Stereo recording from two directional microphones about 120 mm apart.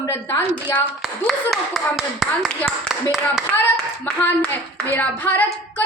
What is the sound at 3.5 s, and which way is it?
A woman's voice, 10° left (ahead or behind).